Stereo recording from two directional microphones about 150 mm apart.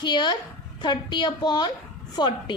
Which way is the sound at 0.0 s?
30° left (ahead or behind).